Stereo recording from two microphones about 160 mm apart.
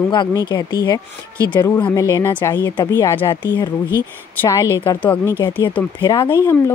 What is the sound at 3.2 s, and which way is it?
Speech, 30° left (ahead or behind).